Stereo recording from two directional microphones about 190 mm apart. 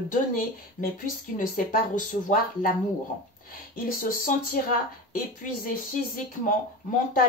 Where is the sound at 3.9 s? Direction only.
45° left (ahead or behind).